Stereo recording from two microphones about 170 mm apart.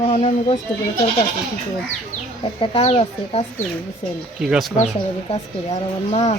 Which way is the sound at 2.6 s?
35° left (ahead or behind).